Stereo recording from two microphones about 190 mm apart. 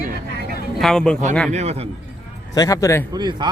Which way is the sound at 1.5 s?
35° right (ahead or behind).